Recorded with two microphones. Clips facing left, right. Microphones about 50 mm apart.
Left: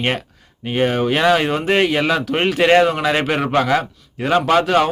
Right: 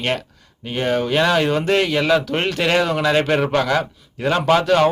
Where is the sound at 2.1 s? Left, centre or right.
Centre.